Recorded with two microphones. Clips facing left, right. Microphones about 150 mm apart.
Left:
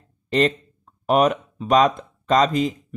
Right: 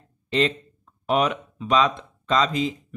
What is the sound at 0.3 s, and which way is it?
Speech, 45° left (ahead or behind).